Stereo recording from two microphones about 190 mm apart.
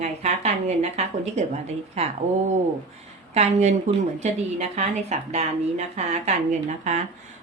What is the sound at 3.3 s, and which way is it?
Speech, 35° right (ahead or behind).